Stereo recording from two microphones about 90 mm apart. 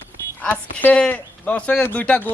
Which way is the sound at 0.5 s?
15° left (ahead or behind).